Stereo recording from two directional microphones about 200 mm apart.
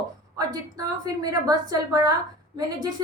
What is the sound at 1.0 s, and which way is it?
A woman's voice, 20° right (ahead or behind).